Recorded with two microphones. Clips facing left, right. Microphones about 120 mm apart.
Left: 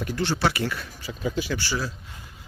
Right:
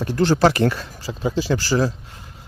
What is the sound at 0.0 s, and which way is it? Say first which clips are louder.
Speech: right 8 dB; 40° right (ahead or behind).